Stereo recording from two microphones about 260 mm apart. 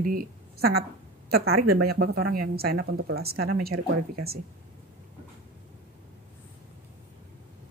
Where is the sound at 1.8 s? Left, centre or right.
Right.